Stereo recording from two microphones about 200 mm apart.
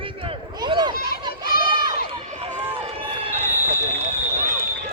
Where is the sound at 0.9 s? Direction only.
50° left (ahead or behind).